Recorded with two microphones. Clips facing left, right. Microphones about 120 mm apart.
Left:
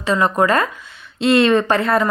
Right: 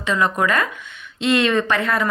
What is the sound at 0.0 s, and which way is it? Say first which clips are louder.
A woman's voice: left 3 dB; 35° left (ahead or behind).